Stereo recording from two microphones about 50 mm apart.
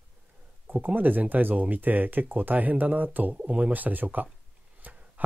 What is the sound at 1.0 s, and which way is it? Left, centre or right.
Speech, right.